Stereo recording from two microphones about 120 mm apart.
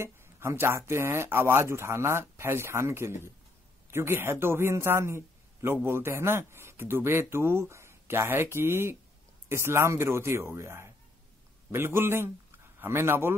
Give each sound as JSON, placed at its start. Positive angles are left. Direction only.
{"t": 0.0, "sound": "a man's voice", "side_deg": -20}